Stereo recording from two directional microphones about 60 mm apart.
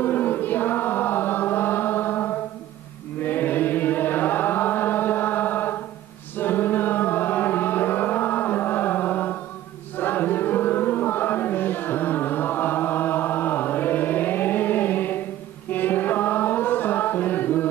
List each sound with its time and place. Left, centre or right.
0.0 s chant: left
6.3 s music: left
15.7 s chant: left